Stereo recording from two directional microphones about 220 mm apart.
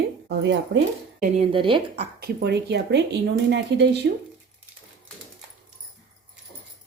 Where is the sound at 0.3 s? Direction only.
55° right (ahead or behind).